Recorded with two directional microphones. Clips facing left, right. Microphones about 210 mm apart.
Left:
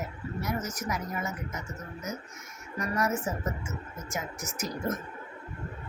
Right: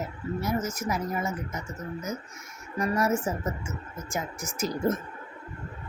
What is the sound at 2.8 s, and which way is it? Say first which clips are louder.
Speech: right 4 dB; 30° right (ahead or behind).